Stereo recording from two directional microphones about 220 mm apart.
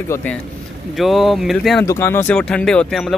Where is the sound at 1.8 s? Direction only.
10° left (ahead or behind).